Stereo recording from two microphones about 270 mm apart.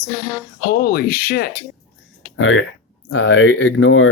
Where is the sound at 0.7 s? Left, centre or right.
Left.